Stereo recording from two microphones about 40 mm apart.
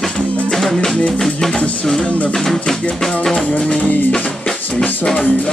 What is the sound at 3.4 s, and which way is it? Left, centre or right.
Music, left.